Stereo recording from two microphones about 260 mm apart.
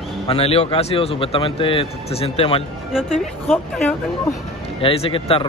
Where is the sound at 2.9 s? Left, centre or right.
Centre.